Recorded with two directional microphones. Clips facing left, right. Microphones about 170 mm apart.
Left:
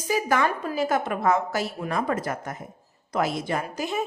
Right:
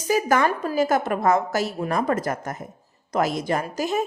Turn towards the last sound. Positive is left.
turn(degrees=-40)  # may be behind; listen again after turning